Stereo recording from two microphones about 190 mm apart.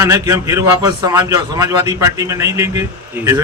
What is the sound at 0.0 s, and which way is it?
A man's voice, 15° right (ahead or behind).